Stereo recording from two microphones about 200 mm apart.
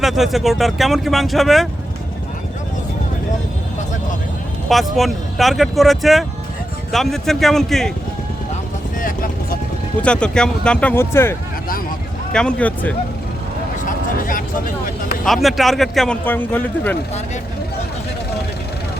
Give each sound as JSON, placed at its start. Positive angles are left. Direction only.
{"t": 0.0, "sound": "speech", "side_deg": 0}
{"t": 4.7, "sound": "speech", "side_deg": 0}
{"t": 9.0, "sound": "vehicle", "side_deg": 45}
{"t": 10.0, "sound": "speech", "side_deg": 5}
{"t": 13.8, "sound": "a sound", "side_deg": 45}
{"t": 15.2, "sound": "speech", "side_deg": 0}